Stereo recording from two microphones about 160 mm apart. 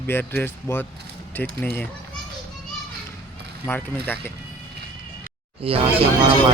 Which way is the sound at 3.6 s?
15° left (ahead or behind).